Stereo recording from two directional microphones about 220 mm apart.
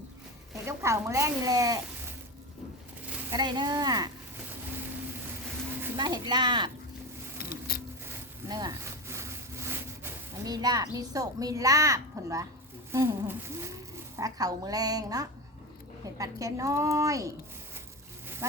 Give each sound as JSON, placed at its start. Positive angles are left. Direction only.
{"t": 0.6, "sound": "speech", "side_deg": -15}
{"t": 3.1, "sound": "speech", "side_deg": -15}
{"t": 6.0, "sound": "speech", "side_deg": -20}
{"t": 7.7, "sound": "a sound", "side_deg": 40}
{"t": 8.0, "sound": "sawing", "side_deg": -15}
{"t": 12.9, "sound": "speech", "side_deg": -10}